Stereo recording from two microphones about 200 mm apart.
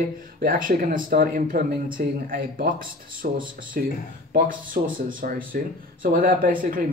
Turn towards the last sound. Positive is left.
turn(degrees=-45)  # may be behind; listen again after turning